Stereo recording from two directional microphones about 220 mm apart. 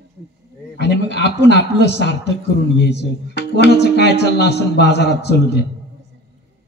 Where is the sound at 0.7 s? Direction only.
50° left (ahead or behind).